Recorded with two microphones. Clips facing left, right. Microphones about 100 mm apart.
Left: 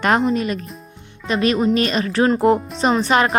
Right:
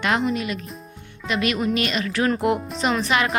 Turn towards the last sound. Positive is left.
turn(degrees=35)  # may be behind; listen again after turning